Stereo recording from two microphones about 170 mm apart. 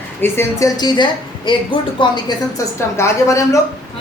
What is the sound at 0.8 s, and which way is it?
A woman's voice, 25° left (ahead or behind).